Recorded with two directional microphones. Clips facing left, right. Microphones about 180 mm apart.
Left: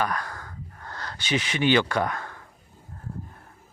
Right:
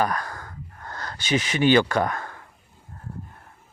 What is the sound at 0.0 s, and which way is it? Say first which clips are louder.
Gasp: right 3 dB; 40° right (ahead or behind).